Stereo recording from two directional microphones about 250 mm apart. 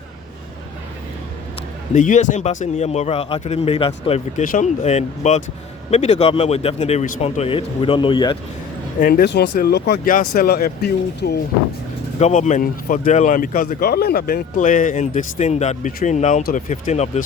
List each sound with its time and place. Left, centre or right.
1.9 s a man's voice: left
9.0 s a man's voice: left
12.2 s a man's voice: left